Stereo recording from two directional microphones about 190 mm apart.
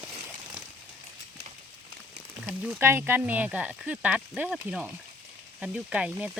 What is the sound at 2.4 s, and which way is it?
Speech, 5° right (ahead or behind).